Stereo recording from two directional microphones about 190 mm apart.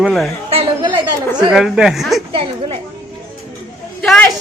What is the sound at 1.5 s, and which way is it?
Speech, centre (ahead or behind).